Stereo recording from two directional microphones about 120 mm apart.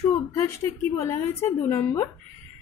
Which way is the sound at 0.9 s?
25° left (ahead or behind).